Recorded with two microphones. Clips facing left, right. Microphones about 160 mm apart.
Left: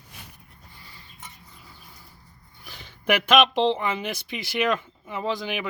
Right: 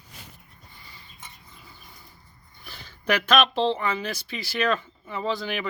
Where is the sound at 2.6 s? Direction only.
15° left (ahead or behind).